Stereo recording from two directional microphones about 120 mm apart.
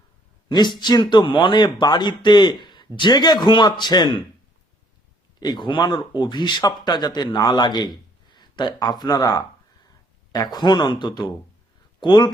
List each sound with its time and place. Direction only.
0.4 s speech: 35° left (ahead or behind)
5.4 s speech: 40° left (ahead or behind)